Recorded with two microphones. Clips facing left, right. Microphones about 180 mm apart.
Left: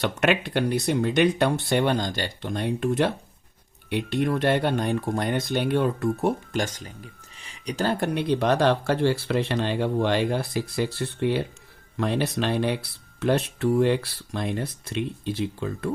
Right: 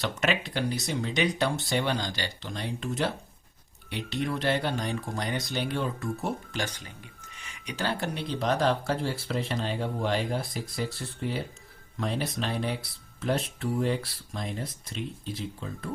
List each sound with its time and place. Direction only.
0.0 s speech: 60° left (ahead or behind)